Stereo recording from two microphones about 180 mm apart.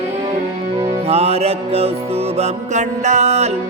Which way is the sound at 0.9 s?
35° right (ahead or behind).